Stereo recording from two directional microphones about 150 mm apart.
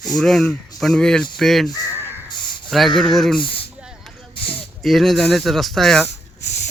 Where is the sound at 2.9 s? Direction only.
Centre (ahead or behind).